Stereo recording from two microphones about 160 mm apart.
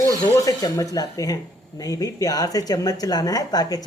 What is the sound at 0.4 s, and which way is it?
Speech, 20° left (ahead or behind).